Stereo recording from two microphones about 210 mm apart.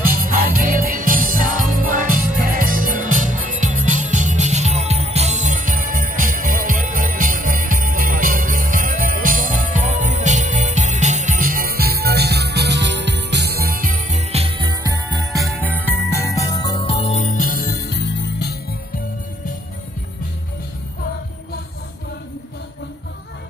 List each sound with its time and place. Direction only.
0.1 s music: 40° right (ahead or behind); by 15.1 s 20° right (ahead or behind)
15.3 s jingle bell: centre (ahead or behind); by 18.8 s 50° left (ahead or behind)